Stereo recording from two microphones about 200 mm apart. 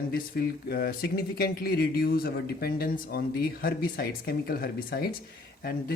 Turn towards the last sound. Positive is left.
turn(degrees=50)  # may be behind; listen again after turning